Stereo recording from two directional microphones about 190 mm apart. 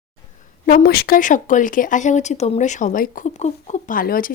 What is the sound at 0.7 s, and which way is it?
Speech, 50° left (ahead or behind).